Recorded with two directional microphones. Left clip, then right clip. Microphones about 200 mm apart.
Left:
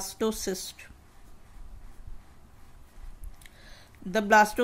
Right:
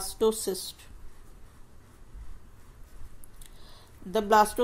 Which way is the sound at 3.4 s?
25° left (ahead or behind).